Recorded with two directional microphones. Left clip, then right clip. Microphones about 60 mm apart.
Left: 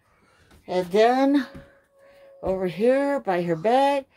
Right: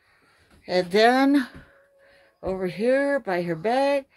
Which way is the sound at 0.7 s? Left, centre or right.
Right.